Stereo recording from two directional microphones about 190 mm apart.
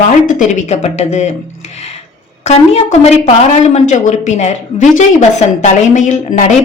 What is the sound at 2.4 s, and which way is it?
A woman's voice, 35° left (ahead or behind).